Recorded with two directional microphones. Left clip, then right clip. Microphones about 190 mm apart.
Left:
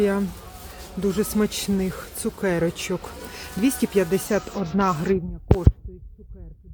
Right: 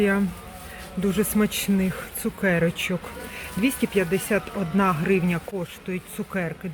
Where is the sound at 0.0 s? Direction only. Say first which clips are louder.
Even; 5° left (ahead or behind).